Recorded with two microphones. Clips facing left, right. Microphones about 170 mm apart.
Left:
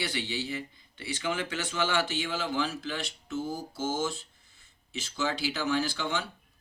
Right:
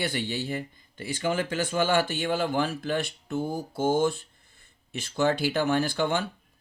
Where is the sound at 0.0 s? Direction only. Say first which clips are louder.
Right 4 dB; 50° right (ahead or behind).